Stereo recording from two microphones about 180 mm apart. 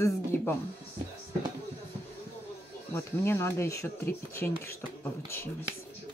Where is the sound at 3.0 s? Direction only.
15° left (ahead or behind).